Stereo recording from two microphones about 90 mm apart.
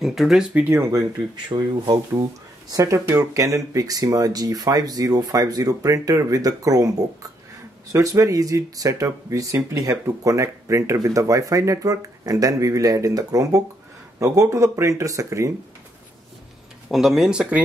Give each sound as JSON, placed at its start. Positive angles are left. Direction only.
{"t": 0.0, "sound": "speech", "side_deg": 0}
{"t": 0.9, "sound": "speech", "side_deg": -50}
{"t": 2.7, "sound": "speech", "side_deg": -35}
{"t": 16.9, "sound": "speech", "side_deg": -5}